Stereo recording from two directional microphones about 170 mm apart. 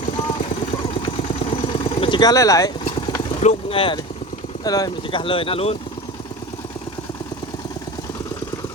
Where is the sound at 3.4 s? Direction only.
40° left (ahead or behind).